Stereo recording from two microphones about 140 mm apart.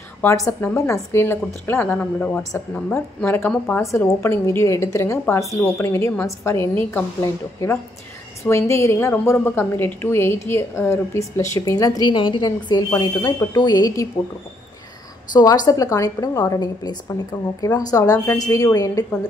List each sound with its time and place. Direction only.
0.5 s a woman's voice: 15° left (ahead or behind)
15.3 s a woman's voice: 30° left (ahead or behind)